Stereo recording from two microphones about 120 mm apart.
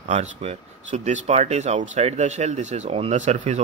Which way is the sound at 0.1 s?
65° right (ahead or behind).